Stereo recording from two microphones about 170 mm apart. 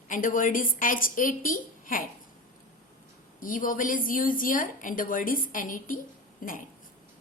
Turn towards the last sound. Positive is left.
turn(degrees=55)  # may be behind; listen again after turning